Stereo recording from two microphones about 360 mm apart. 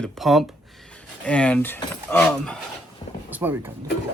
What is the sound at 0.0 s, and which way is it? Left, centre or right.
Speech, centre.